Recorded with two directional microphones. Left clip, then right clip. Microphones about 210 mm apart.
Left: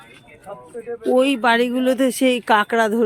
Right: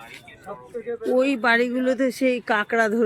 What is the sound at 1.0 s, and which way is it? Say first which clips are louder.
Speech: left 4 dB; 15° left (ahead or behind).